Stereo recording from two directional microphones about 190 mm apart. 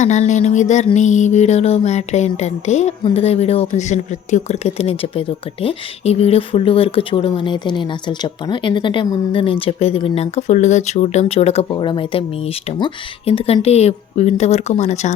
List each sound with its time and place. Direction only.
0.0 s music: 40° left (ahead or behind)